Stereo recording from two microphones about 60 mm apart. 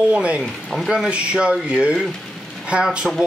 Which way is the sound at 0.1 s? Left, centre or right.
Centre.